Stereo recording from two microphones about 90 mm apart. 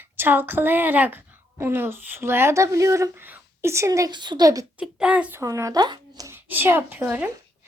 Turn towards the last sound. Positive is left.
turn(degrees=-20)  # may be behind; listen again after turning